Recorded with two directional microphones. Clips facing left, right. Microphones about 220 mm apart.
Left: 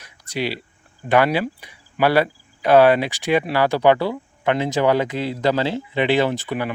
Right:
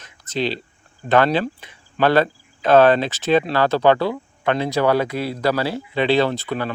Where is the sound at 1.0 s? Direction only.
15° left (ahead or behind).